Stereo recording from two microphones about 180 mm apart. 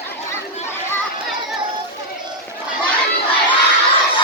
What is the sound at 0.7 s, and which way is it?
Children playing, 15° left (ahead or behind).